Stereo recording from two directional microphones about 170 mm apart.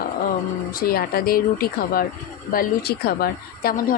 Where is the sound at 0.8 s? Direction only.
60° left (ahead or behind).